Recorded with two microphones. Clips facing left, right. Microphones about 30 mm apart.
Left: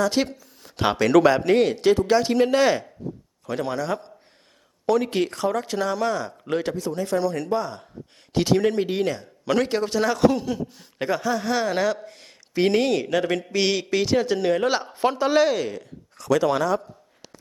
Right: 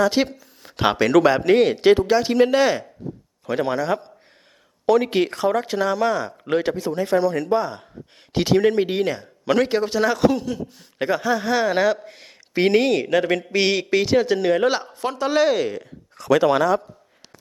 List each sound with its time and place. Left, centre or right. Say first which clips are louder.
0.0 s a man's voice: right 3 dB; centre
1.8 s speech: right 4 dB; right
2.0 s speech: right 2 dB; centre
3.4 s a man's voice: right 4 dB; centre
7.2 s a man's voice: right 4 dB; centre
10.9 s a man's voice: right 3 dB; centre
14.9 s speech: left 4 dB; centre
15.2 s a man's voice: right 3 dB; centre